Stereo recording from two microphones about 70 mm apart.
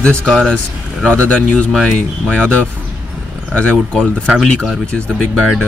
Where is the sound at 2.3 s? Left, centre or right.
Centre.